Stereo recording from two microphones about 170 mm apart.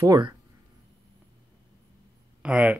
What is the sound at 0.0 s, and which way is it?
Speech, 20° right (ahead or behind).